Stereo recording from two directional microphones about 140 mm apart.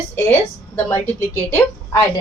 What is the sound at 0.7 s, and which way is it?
A woman's voice, 15° left (ahead or behind).